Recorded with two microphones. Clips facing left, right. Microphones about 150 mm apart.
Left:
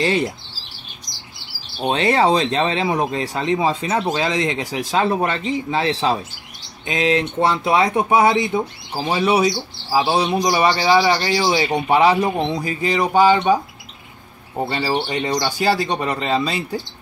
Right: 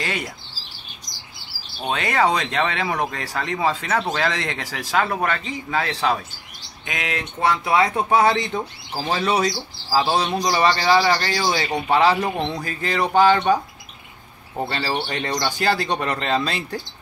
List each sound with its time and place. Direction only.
0.0 s speech: 30° left (ahead or behind)
1.8 s speech: 30° left (ahead or behind); by 13.6 s 10° left (ahead or behind)
14.7 s speech: 15° left (ahead or behind)